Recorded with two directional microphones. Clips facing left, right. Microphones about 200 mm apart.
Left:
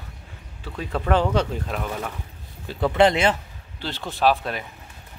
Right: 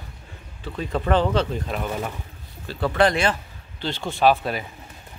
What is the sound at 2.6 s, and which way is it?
Speech, 15° left (ahead or behind).